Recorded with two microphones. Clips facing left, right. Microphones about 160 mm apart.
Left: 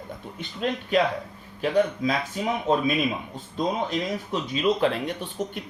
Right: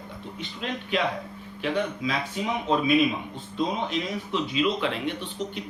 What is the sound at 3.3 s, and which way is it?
Speech, 45° left (ahead or behind).